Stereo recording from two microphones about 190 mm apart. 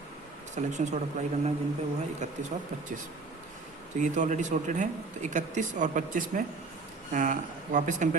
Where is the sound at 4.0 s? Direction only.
40° right (ahead or behind).